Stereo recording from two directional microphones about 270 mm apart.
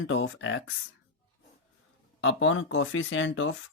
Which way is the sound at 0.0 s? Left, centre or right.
Left.